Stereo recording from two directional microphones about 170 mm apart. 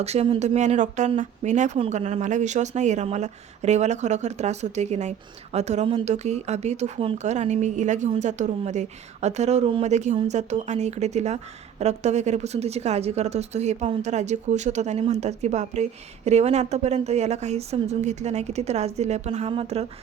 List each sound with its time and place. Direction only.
0.0 s speech: 40° right (ahead or behind)